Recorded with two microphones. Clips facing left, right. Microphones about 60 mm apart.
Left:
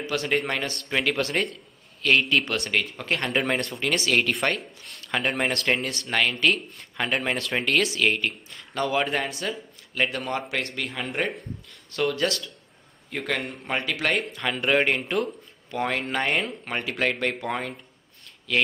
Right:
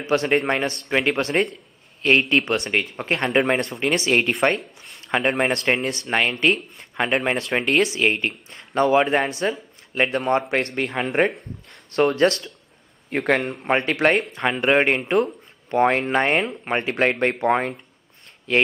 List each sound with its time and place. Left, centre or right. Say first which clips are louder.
0.0 s speech: right 6 dB; right